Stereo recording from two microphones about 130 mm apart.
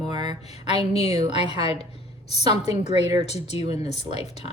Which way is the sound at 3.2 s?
55° left (ahead or behind).